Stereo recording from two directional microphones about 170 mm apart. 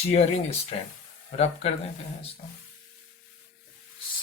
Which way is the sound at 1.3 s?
40° left (ahead or behind).